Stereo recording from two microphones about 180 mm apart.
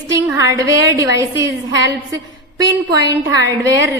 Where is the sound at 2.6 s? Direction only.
20° right (ahead or behind).